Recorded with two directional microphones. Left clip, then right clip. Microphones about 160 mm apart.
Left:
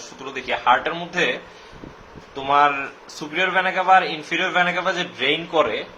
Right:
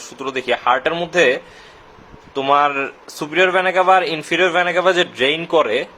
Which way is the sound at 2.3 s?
90° right.